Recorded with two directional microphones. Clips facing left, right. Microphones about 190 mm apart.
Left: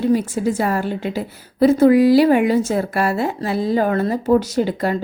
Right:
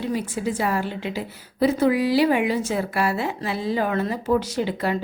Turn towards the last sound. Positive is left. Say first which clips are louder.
# left 5 dB
turn(degrees=45)  # may be behind; listen again after turning